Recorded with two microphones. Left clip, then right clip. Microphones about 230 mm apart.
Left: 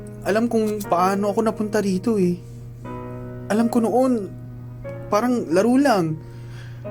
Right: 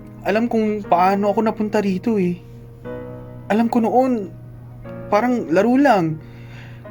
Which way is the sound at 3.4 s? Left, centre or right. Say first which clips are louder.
Right 2 dB; right.